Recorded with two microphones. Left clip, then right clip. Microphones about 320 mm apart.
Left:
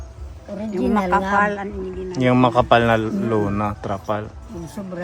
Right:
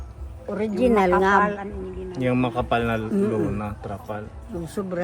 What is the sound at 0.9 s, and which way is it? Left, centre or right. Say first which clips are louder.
A woman's voice: even; left.